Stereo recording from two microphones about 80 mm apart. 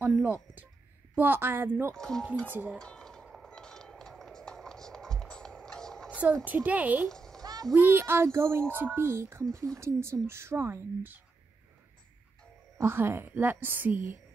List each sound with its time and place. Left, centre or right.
0.2 s speech: right
2.0 s speech: centre
2.4 s speech: right
2.8 s a sound: centre
6.0 s a sound: centre
6.4 s speech: right
7.1 s a sound: centre
7.7 s a child's voice: right
12.8 s speech: right